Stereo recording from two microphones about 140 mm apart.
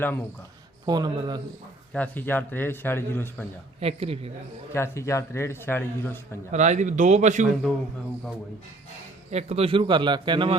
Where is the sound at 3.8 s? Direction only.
45° right (ahead or behind).